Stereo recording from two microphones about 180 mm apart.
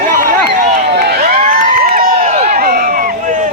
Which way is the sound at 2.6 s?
55° right (ahead or behind).